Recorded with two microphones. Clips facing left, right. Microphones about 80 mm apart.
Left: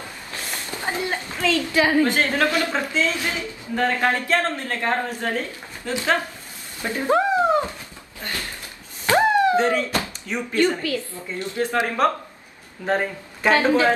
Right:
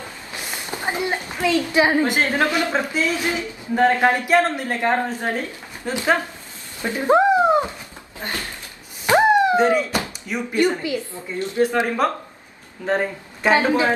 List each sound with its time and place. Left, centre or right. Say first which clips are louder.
0.3 s a woman's voice: right 1 dB; centre
6.8 s dog: right 4 dB; right
8.2 s a sound: right 2 dB; right
9.9 s a woman's voice: right 1 dB; centre
12.8 s speech: right 1 dB; centre
13.5 s a woman's voice: even; right